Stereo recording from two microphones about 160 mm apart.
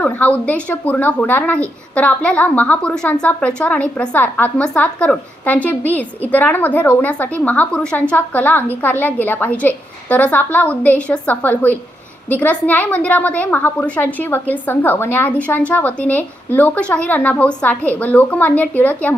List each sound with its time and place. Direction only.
0.0 s a woman's voice: 10° left (ahead or behind)